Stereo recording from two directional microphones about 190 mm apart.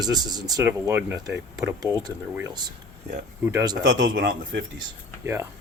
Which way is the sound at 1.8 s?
20° right (ahead or behind).